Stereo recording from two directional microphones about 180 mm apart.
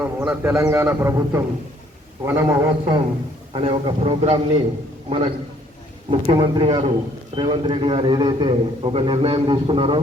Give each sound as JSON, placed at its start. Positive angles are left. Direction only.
{"t": 0.0, "sound": "a man's voice", "side_deg": -10}
{"t": 3.5, "sound": "a man's voice", "side_deg": -30}